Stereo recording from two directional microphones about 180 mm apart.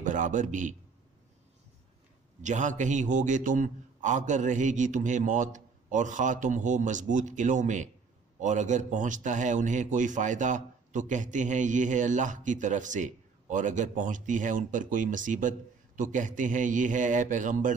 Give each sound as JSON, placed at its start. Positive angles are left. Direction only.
{"t": 0.0, "sound": "a man's voice", "side_deg": -45}
{"t": 2.4, "sound": "a man's voice", "side_deg": -40}